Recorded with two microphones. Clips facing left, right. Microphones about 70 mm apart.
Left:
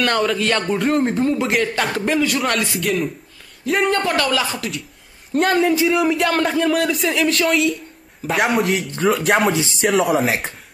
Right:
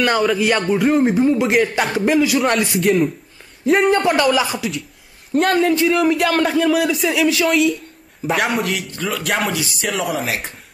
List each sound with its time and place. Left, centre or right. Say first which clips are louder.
0.0 s a man's voice: right 2 dB; centre
3.9 s speech: right 4 dB; centre
5.3 s a man's voice: right 1 dB; centre
9.5 s speech: left 4 dB; left
9.8 s a man's voice: left 6 dB; centre